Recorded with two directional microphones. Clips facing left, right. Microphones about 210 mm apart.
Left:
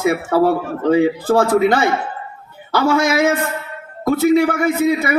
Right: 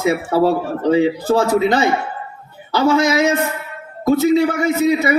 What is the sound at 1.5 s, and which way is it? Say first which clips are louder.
A man's voice: left 1 dB; 20° right (ahead or behind).